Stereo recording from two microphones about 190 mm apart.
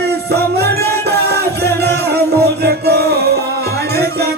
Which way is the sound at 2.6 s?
60° right (ahead or behind).